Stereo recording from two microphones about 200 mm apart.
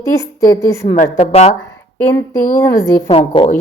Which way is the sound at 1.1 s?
30° left (ahead or behind).